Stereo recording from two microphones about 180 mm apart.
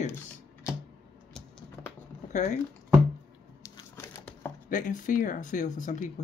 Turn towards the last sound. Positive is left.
turn(degrees=45)  # may be behind; listen again after turning